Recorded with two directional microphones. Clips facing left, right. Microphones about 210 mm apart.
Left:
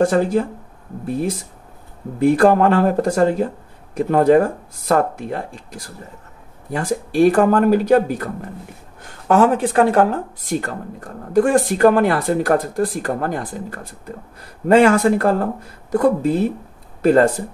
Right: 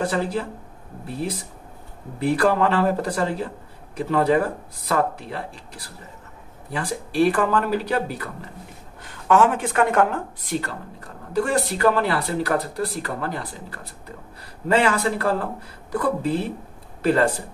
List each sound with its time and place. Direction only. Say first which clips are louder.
0.0 s speech: left 8 dB; 45° left (ahead or behind)